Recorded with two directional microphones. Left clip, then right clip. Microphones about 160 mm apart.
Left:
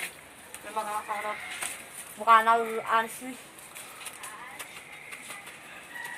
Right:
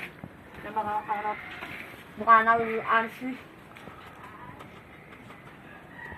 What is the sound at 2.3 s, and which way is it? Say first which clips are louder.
Speech: right 1 dB; 5° right (ahead or behind).